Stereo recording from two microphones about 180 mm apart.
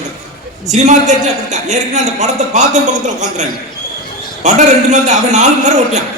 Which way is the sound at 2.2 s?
40° right (ahead or behind).